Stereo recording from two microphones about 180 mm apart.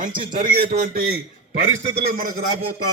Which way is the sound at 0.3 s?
50° right (ahead or behind).